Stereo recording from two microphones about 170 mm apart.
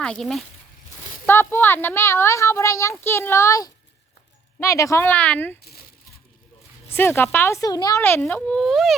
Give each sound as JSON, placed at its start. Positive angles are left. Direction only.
{"t": 0.0, "sound": "speech", "side_deg": 5}
{"t": 1.3, "sound": "a woman's voice", "side_deg": 15}
{"t": 6.9, "sound": "a woman's voice", "side_deg": 15}